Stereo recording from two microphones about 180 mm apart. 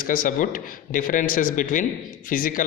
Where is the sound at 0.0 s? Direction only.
50° left (ahead or behind).